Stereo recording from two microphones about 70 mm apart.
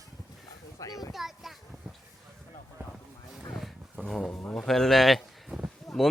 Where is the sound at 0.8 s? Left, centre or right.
Left.